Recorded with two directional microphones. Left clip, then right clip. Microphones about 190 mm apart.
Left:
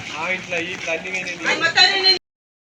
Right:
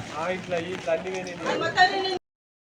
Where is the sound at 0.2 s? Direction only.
45° right (ahead or behind).